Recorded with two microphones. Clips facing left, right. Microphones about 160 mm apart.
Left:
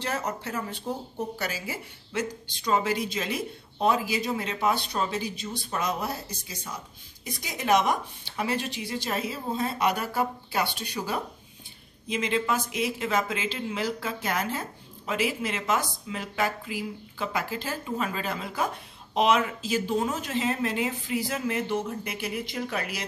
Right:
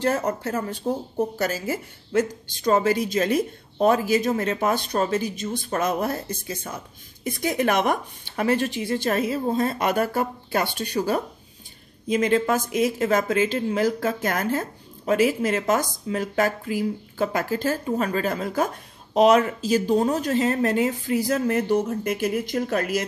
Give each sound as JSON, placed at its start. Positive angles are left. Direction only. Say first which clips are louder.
{"t": 0.0, "sound": "speech", "louder": "right 8 dB", "side_deg": -50}